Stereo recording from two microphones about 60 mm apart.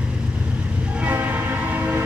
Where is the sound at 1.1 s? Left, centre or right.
Right.